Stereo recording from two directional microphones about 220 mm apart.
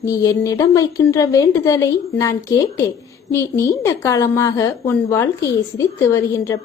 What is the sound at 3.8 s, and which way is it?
A woman's voice, 15° left (ahead or behind).